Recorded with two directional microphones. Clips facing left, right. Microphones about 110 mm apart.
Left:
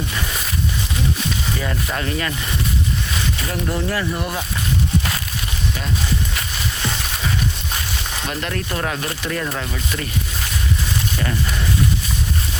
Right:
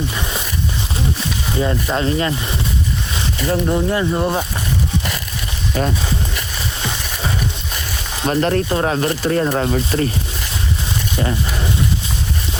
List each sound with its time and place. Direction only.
1.5 s speech: 25° right (ahead or behind)
3.5 s speech: 20° right (ahead or behind)
8.3 s speech: 35° right (ahead or behind)